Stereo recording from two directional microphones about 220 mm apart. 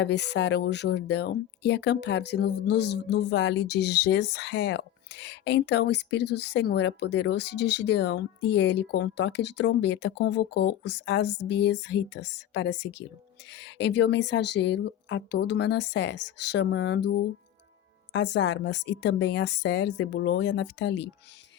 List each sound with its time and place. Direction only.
0.0 s speech: 50° left (ahead or behind)